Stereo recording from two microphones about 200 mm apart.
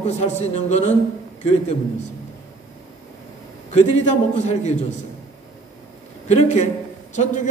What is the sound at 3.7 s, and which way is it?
A man's voice, 35° left (ahead or behind).